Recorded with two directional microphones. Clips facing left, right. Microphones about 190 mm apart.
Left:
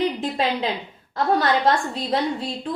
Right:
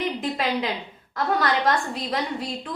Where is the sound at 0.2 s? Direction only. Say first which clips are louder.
Left 2 dB; 30° left (ahead or behind).